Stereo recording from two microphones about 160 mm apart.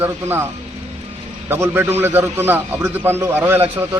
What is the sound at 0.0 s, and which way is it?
Speech, 15° right (ahead or behind).